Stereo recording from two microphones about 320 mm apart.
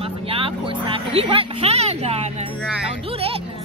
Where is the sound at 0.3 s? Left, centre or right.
Centre.